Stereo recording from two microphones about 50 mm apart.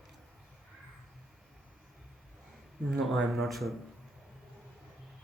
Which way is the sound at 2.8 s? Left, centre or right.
Centre.